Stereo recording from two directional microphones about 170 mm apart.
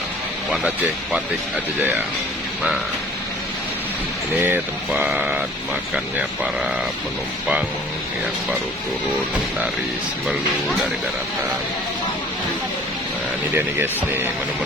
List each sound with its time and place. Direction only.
4.4 s speech: 10° right (ahead or behind)
13.6 s speech: 10° right (ahead or behind)